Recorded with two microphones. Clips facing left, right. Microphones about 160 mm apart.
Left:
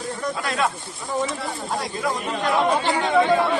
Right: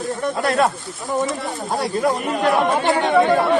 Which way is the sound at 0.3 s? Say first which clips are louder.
Right 7 dB; 45° right (ahead or behind).